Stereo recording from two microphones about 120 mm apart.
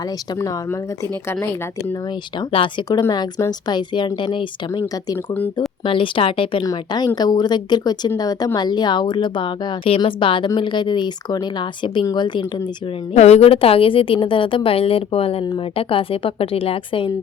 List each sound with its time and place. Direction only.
0.3 s speech: 20° left (ahead or behind)
2.5 s a woman's voice: 45° left (ahead or behind)
5.1 s speech: 15° left (ahead or behind)
5.5 s a woman's voice: 45° left (ahead or behind)
6.7 s a woman's voice: 35° left (ahead or behind)
13.1 s a woman's voice: 65° left (ahead or behind)